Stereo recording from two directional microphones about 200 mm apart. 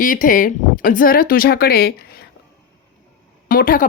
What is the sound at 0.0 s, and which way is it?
A woman's voice, 45° left (ahead or behind).